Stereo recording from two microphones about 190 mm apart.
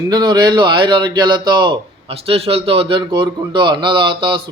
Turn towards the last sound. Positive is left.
turn(degrees=-25)  # may be behind; listen again after turning